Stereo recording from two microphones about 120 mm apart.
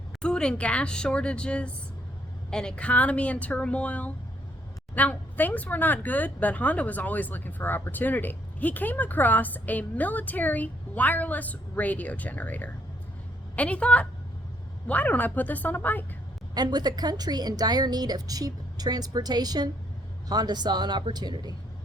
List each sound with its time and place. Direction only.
0.2 s speech: 5° left (ahead or behind)
16.6 s a woman's voice: 35° right (ahead or behind)